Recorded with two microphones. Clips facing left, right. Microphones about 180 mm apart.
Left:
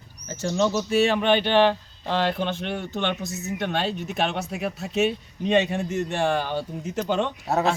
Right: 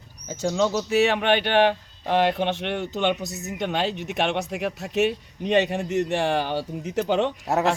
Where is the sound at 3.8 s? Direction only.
75° right (ahead or behind).